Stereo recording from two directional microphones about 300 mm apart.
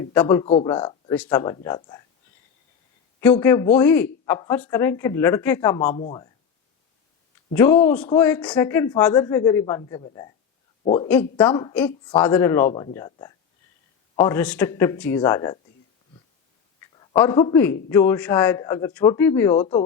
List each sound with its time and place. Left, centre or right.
0.1 s a man's voice: centre
3.2 s a man's voice: centre
7.5 s a man's voice: centre
11.1 s a woman's voice: centre
16.8 s a man's voice: centre